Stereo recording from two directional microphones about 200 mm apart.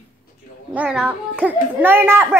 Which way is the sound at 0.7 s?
5° right (ahead or behind).